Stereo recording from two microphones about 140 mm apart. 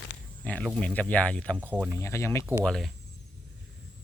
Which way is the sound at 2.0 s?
20° left (ahead or behind).